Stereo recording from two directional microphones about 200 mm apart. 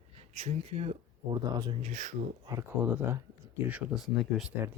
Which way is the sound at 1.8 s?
40° right (ahead or behind).